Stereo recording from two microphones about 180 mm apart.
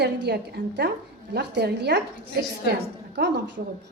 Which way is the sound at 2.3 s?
60° right (ahead or behind).